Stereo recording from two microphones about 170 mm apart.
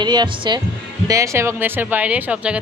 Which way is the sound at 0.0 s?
25° right (ahead or behind).